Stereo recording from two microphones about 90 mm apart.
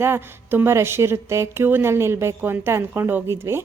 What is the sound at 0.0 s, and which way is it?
Speech, 25° right (ahead or behind).